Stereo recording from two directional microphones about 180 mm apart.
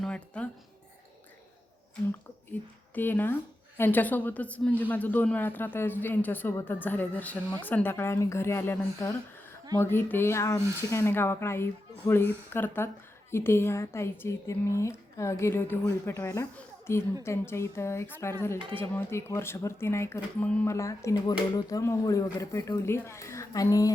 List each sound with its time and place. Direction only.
0.0 s music: 5° left (ahead or behind)
2.5 s a woman's voice: 10° left (ahead or behind)
16.6 s a sound: 15° left (ahead or behind)
17.2 s speech: 15° left (ahead or behind)